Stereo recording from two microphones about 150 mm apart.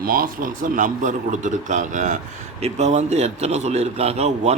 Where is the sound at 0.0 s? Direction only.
70° right (ahead or behind).